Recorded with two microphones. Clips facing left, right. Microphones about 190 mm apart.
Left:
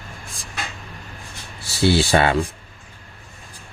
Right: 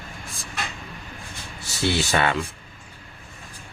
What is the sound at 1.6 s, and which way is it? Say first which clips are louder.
Speech: left 6 dB; 30° left (ahead or behind).